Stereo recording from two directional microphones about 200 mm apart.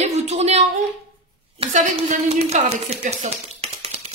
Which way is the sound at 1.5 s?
35° right (ahead or behind).